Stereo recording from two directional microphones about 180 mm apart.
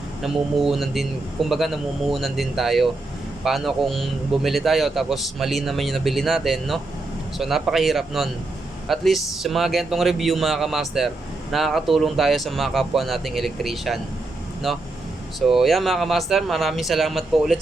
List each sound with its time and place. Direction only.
0.2 s a man's voice: centre (ahead or behind)